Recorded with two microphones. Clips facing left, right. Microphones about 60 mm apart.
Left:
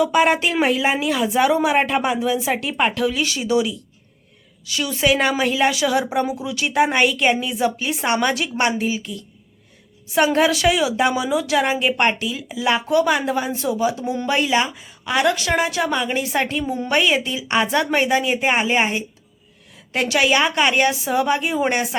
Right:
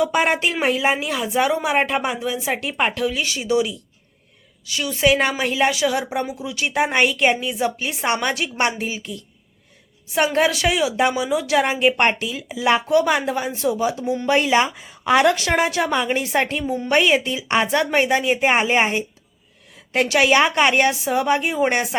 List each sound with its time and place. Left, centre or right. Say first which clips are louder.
0.0 s a woman's voice: left 2 dB; right
5.0 s speech: even; right
6.9 s a woman's voice: even; right